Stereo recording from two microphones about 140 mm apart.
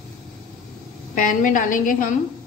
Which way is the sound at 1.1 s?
70° left (ahead or behind).